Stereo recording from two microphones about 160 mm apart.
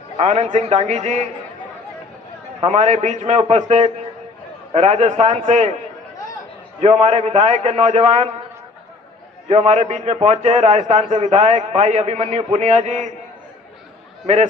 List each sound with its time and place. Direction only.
0.2 s a man's voice: 45° right (ahead or behind)
2.6 s a man's voice: 45° right (ahead or behind)
6.7 s a man's voice: 45° right (ahead or behind)
9.5 s a man's voice: 45° right (ahead or behind)